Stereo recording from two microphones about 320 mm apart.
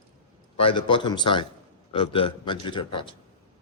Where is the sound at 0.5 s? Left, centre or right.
Centre.